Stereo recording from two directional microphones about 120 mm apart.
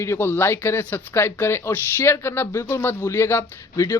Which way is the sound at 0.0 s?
20° left (ahead or behind).